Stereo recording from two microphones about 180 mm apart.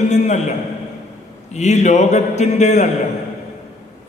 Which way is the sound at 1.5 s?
40° left (ahead or behind).